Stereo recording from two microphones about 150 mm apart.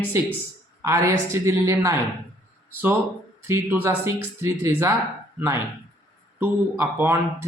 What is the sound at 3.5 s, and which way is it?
Speech, 15° right (ahead or behind).